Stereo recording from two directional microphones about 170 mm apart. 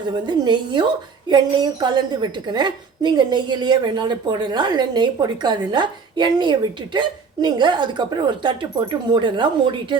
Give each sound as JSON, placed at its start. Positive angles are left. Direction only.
{"t": 0.3, "sound": "a woman's voice", "side_deg": -25}